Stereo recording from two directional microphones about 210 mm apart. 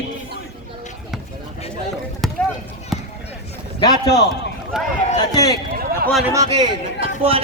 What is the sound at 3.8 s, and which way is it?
Speech, 15° left (ahead or behind).